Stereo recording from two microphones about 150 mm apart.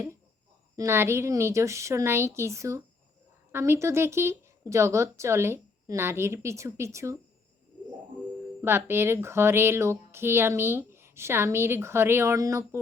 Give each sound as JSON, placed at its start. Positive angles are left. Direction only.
{"t": 0.8, "sound": "speech", "side_deg": -15}
{"t": 8.6, "sound": "speech", "side_deg": -15}